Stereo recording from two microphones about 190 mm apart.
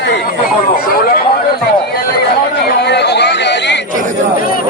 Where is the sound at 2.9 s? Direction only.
60° left (ahead or behind).